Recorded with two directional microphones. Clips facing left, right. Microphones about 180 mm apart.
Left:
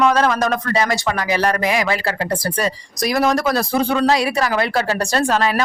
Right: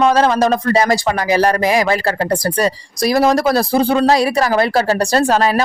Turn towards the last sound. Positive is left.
turn(degrees=-35)  # may be behind; listen again after turning